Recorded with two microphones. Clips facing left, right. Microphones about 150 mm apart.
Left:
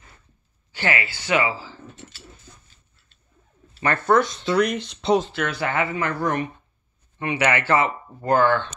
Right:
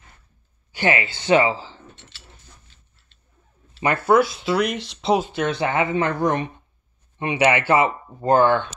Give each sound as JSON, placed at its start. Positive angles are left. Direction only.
{"t": 0.7, "sound": "speech", "side_deg": -15}
{"t": 3.8, "sound": "speech", "side_deg": -10}
{"t": 5.2, "sound": "speech", "side_deg": -20}